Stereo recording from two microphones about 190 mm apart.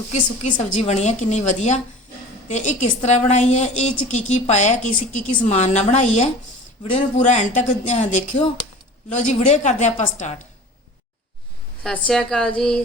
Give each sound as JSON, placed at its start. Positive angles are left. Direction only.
{"t": 0.1, "sound": "a woman's voice", "side_deg": 40}
{"t": 11.8, "sound": "speech", "side_deg": 5}